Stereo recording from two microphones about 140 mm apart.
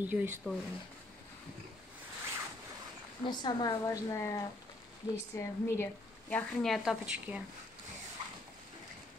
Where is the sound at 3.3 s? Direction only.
30° left (ahead or behind); by 7.4 s 5° right (ahead or behind).